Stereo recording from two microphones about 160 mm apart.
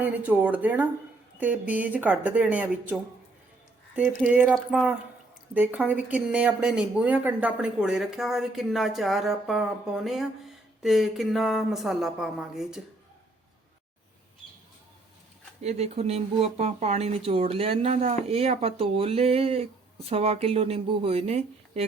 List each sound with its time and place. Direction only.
0.0 s speech: 10° right (ahead or behind)
15.6 s speech: 40° right (ahead or behind)